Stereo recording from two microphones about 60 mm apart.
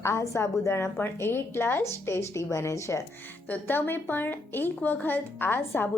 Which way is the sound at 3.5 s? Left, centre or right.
Left.